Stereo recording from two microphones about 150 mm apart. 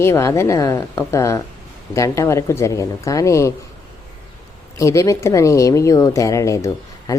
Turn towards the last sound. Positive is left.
turn(degrees=20)  # may be behind; listen again after turning